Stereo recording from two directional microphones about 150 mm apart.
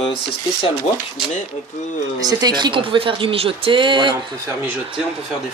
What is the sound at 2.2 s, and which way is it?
Speech, 30° right (ahead or behind).